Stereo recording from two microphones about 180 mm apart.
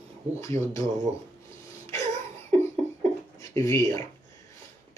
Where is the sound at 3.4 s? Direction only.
15° left (ahead or behind).